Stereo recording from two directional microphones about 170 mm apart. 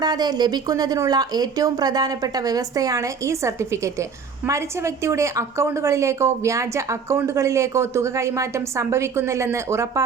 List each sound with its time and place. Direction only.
0.0 s a woman's voice: 25° right (ahead or behind)